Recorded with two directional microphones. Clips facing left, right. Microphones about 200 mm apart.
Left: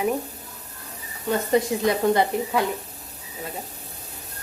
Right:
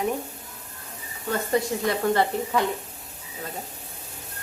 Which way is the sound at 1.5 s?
15° left (ahead or behind).